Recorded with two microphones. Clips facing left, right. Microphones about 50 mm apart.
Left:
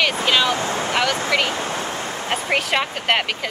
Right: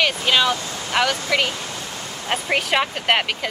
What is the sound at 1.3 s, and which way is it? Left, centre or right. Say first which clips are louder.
Speech: left 2 dB; centre.